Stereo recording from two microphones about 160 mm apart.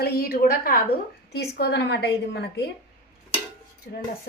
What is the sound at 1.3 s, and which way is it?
A woman's voice, 90° left.